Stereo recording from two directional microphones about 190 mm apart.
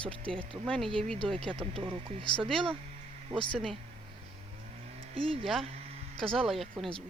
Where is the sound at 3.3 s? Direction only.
25° right (ahead or behind).